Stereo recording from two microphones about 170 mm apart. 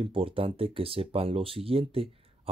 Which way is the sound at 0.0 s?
35° right (ahead or behind).